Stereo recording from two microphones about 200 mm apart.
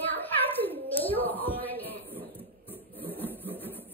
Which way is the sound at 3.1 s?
10° left (ahead or behind).